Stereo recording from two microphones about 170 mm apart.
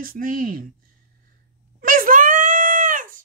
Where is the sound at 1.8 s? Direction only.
55° right (ahead or behind).